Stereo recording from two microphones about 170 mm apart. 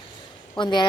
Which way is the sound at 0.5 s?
25° left (ahead or behind).